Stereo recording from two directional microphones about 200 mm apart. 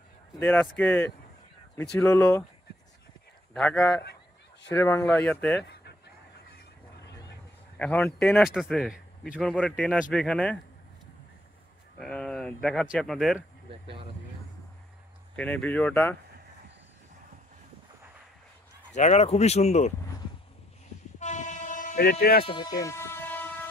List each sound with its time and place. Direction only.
0.4 s speech: 10° left (ahead or behind)
3.5 s speech: 5° left (ahead or behind)
7.7 s a man's voice: 5° left (ahead or behind)
12.0 s a man's voice: 5° left (ahead or behind)
15.3 s speech: 10° left (ahead or behind)
18.9 s speech: 35° left (ahead or behind)
21.2 s train: 40° left (ahead or behind)
22.4 s a sound: 25° left (ahead or behind); by 23.7 s 10° left (ahead or behind)